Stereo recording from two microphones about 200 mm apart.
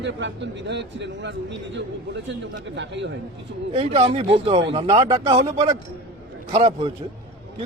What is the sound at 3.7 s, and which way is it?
A man's voice, 30° right (ahead or behind).